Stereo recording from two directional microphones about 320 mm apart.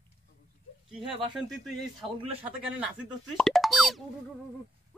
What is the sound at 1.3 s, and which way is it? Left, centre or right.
Speech, centre.